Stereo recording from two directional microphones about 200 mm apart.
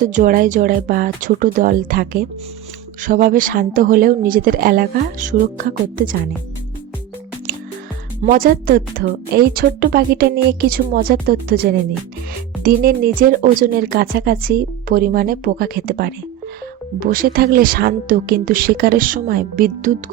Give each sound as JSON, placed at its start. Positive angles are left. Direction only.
{"t": 0.0, "sound": "a woman's voice", "side_deg": -40}
{"t": 8.2, "sound": "a woman's voice", "side_deg": -45}